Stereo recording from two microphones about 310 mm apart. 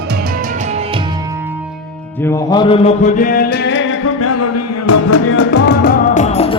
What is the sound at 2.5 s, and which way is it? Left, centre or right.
Music, centre.